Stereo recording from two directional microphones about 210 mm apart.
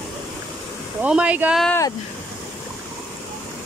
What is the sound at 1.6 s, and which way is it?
Speech, 15° left (ahead or behind).